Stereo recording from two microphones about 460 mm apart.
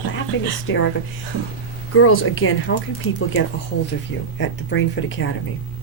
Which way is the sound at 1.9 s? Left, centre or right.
Left.